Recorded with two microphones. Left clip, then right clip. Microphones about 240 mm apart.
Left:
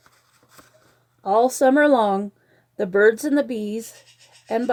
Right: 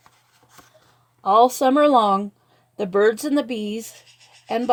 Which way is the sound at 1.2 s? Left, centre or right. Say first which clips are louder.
Right 2 dB; right.